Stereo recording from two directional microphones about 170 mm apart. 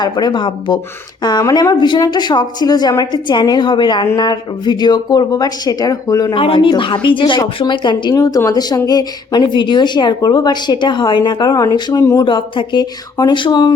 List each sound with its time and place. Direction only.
0.0 s a woman's voice: 25° left (ahead or behind)